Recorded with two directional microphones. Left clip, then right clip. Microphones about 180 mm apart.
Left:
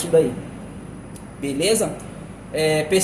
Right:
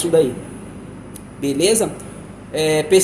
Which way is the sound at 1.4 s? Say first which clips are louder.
Right 3 dB; 35° right (ahead or behind).